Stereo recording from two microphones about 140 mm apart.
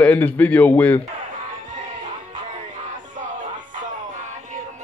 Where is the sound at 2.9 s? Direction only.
65° right (ahead or behind).